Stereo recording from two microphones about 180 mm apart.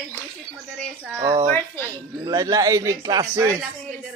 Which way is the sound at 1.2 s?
25° right (ahead or behind).